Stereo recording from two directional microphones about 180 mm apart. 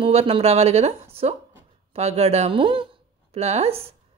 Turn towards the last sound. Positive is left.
turn(degrees=-35)  # may be behind; listen again after turning